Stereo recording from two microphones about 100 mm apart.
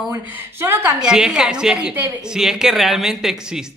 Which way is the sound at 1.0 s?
5° right (ahead or behind).